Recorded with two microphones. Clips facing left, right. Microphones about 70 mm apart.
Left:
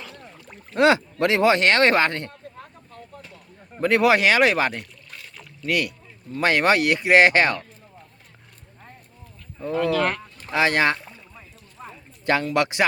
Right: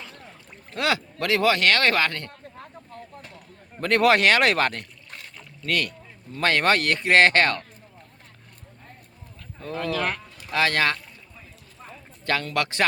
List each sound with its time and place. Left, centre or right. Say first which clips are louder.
0.0 s speech: left 2 dB; left
3.8 s speech: left 1 dB; centre
5.4 s boat: left 2 dB; centre
6.4 s speech: left 2 dB; centre
9.6 s speech: left 6 dB; centre
11.8 s a sound: left 3 dB; centre